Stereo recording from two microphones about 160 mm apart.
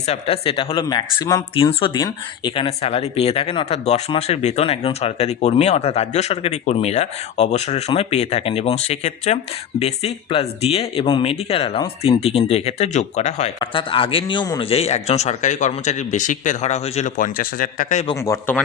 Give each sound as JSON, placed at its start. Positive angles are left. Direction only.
{"t": 0.0, "sound": "speech", "side_deg": 40}
{"t": 1.5, "sound": "speech", "side_deg": 35}
{"t": 13.6, "sound": "speech", "side_deg": 35}
{"t": 14.7, "sound": "speech", "side_deg": 40}
{"t": 17.2, "sound": "speech", "side_deg": 60}
{"t": 18.2, "sound": "speech", "side_deg": 15}